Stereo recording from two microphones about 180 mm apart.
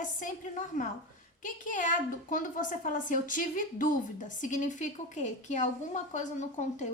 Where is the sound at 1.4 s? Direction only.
45° left (ahead or behind).